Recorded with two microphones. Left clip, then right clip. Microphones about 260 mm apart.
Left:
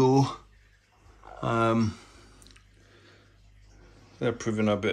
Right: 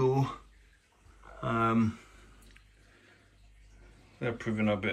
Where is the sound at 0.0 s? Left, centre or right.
Centre.